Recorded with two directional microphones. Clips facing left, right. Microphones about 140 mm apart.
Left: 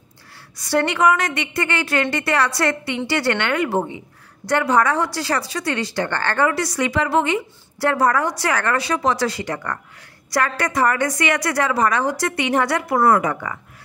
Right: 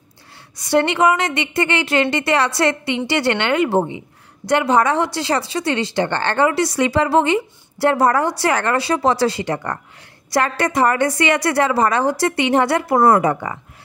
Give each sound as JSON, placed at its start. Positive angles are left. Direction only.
{"t": 0.6, "sound": "speech", "side_deg": -20}